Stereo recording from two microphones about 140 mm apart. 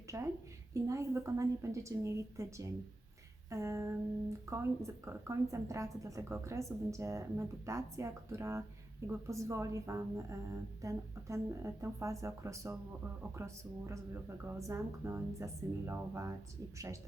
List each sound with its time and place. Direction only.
0.1 s speech: 20° right (ahead or behind)